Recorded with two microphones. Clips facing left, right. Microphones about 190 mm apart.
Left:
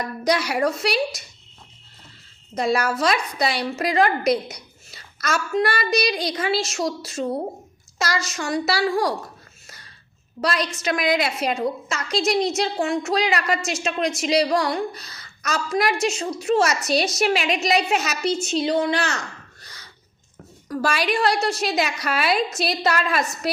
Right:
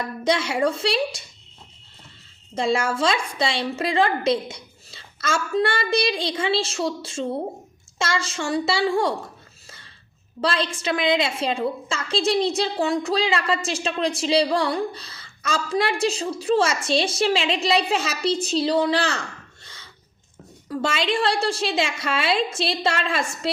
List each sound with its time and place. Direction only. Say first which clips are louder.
0.0 s a woman's voice: left 1 dB; 25° right (ahead or behind)
2.6 s a woman's voice: even; 25° right (ahead or behind)
10.4 s a woman's voice: even; 30° right (ahead or behind)
19.6 s a sound: even; 25° right (ahead or behind)
20.7 s a woman's voice: left 1 dB; 25° right (ahead or behind)